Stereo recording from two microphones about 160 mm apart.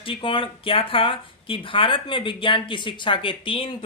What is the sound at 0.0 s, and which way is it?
Speech, 35° left (ahead or behind).